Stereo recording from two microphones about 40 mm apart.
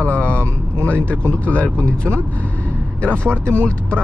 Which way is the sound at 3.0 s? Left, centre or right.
Left.